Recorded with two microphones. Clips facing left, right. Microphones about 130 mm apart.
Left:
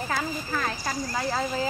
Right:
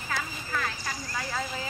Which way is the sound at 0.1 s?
40° left (ahead or behind).